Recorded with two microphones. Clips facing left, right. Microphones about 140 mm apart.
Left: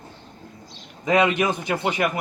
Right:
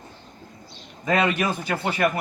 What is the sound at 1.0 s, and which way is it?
A man's voice, 20° left (ahead or behind).